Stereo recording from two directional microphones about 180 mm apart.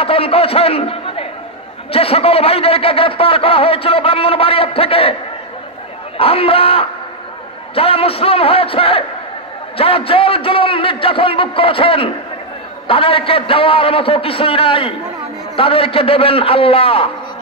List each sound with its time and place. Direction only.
0.0 s a man's voice: 30° left (ahead or behind)
6.1 s a man's voice: 30° left (ahead or behind)